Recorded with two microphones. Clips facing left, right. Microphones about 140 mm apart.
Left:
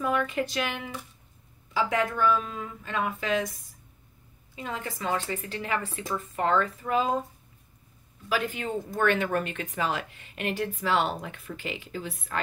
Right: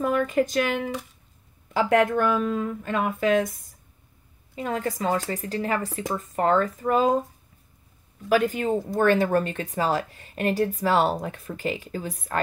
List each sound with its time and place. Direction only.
0.0 s speech: 45° right (ahead or behind)
4.6 s speech: 45° right (ahead or behind)
8.3 s speech: 45° right (ahead or behind)